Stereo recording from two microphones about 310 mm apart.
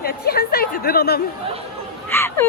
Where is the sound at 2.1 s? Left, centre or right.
Centre.